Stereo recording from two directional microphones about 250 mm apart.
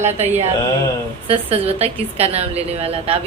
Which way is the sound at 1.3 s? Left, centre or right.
Right.